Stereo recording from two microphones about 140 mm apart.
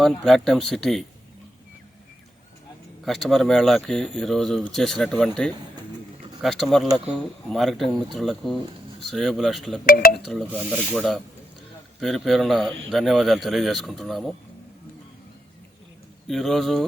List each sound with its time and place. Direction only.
0.0 s speech: centre (ahead or behind)
3.0 s speech: centre (ahead or behind)
6.4 s speech: centre (ahead or behind)
9.8 s speech: 90° left
10.6 s speech: 5° right (ahead or behind)
16.2 s speech: centre (ahead or behind)